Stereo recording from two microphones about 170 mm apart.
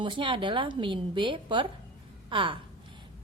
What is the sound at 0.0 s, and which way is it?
A woman's voice, 30° right (ahead or behind).